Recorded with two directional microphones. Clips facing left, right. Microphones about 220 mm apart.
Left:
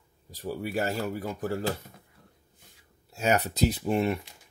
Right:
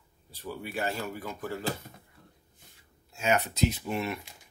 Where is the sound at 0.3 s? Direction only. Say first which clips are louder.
Left 6 dB; 40° left (ahead or behind).